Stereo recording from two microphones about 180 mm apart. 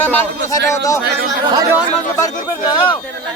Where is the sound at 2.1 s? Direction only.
20° left (ahead or behind).